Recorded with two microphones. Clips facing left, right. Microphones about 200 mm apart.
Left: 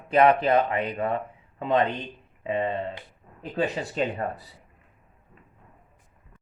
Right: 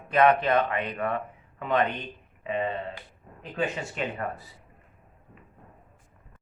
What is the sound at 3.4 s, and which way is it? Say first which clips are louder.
Speech: left 3 dB; 35° left (ahead or behind).